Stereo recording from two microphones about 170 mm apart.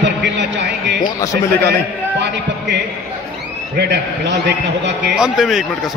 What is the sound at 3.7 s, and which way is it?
A man's voice, 75° right (ahead or behind).